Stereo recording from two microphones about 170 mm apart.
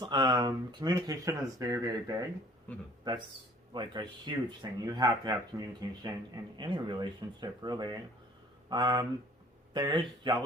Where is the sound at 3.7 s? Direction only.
25° right (ahead or behind).